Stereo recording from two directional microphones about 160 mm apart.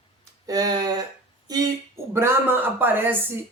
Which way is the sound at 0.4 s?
25° right (ahead or behind).